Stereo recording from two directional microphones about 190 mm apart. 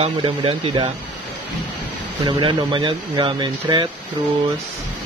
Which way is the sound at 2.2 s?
25° right (ahead or behind).